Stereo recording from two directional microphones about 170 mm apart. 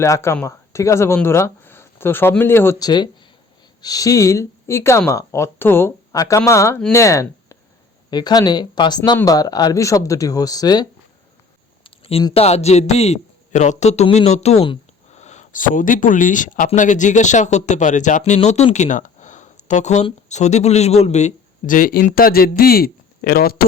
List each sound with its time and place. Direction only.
0.0 s speech: 15° left (ahead or behind)
11.8 s a sound: 35° left (ahead or behind)
12.3 s a man's voice: 35° left (ahead or behind); by 23.6 s 60° left (ahead or behind)